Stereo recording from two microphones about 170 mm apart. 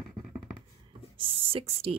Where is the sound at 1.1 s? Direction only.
30° right (ahead or behind).